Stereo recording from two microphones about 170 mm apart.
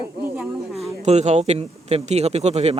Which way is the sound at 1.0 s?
45° right (ahead or behind).